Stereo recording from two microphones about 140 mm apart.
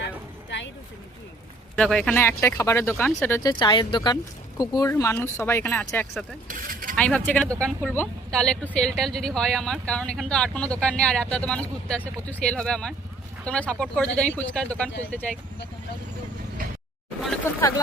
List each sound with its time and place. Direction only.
1.7 s speech: 5° left (ahead or behind)
3.6 s speech: 35° left (ahead or behind); by 6.3 s 10° left (ahead or behind)
6.5 s speech: 80° right
6.9 s speech: 10° left (ahead or behind)
17.5 s speech: 20° left (ahead or behind)